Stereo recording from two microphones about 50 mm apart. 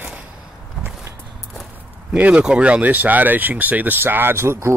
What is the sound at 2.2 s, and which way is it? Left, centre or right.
Speech, right.